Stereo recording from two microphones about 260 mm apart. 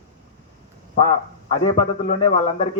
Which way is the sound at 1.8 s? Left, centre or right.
Left.